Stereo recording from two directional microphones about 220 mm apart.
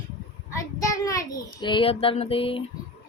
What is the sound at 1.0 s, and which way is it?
Music, 15° left (ahead or behind).